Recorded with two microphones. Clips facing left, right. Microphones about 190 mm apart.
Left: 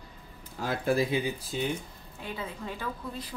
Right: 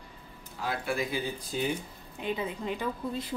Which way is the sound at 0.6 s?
40° left (ahead or behind).